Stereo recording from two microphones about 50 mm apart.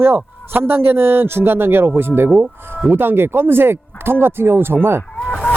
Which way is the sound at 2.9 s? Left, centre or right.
Right.